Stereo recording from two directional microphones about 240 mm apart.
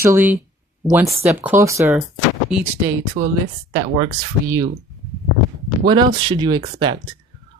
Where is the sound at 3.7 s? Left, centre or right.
Centre.